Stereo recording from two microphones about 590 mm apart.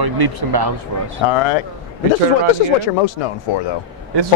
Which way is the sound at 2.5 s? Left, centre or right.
Left.